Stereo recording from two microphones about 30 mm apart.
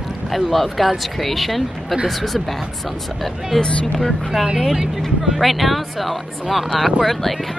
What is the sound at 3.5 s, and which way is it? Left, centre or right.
Speech, centre.